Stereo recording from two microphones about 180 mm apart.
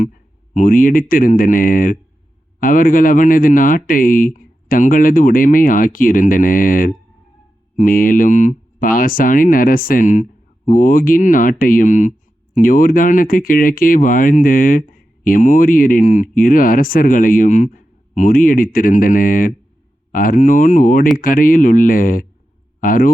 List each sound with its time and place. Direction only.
0.5 s speech: 50° left (ahead or behind)